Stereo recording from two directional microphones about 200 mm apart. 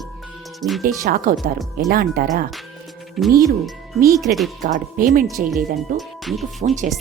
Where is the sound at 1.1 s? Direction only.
45° right (ahead or behind).